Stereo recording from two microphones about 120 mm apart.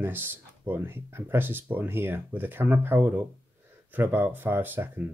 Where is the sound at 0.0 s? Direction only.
20° right (ahead or behind).